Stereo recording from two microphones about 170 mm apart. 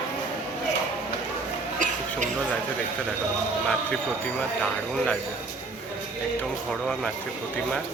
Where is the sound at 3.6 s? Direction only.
5° left (ahead or behind).